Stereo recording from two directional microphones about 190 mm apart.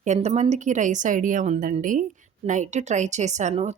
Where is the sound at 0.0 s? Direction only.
40° right (ahead or behind).